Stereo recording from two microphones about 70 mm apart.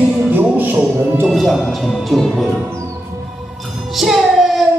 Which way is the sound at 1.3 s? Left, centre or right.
Centre.